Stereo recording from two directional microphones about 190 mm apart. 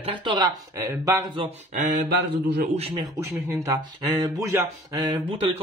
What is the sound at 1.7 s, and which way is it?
Speech, 50° right (ahead or behind).